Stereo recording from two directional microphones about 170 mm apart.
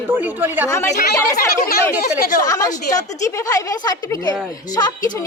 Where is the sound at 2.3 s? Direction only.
20° left (ahead or behind).